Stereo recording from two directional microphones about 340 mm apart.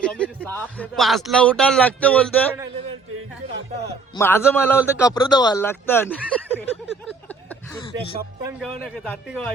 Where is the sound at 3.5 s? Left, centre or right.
Right.